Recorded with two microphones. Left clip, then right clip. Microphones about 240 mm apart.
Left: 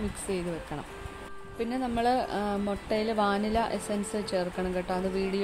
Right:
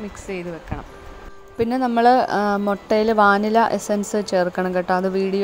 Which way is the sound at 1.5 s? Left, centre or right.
Right.